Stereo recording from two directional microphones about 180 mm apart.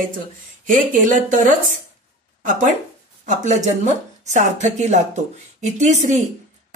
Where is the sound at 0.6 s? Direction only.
45° right (ahead or behind).